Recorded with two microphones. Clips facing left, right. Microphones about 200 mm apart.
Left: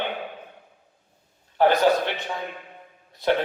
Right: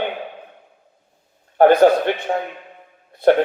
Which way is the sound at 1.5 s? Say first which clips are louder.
Right 7 dB; 50° right (ahead or behind).